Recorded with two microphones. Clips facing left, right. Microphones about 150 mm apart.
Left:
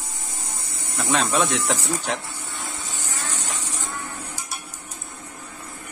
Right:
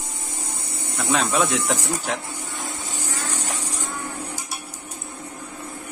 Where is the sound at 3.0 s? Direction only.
10° right (ahead or behind).